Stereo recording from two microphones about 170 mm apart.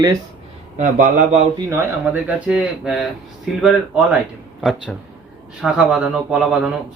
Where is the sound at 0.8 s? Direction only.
45° right (ahead or behind).